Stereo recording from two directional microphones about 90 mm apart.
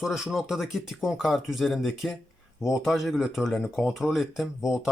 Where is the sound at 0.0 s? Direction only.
5° right (ahead or behind).